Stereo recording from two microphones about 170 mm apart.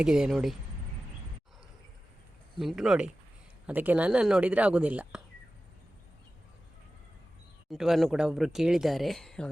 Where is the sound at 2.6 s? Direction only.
Centre (ahead or behind).